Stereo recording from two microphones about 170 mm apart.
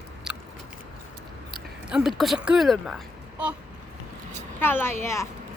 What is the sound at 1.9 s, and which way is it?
Speech, centre (ahead or behind).